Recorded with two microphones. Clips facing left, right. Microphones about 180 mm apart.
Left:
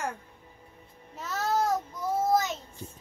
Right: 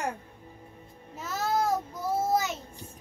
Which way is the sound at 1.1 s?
5° right (ahead or behind).